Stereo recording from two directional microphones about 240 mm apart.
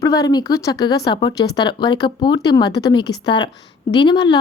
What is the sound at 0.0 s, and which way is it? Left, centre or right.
Speech, centre.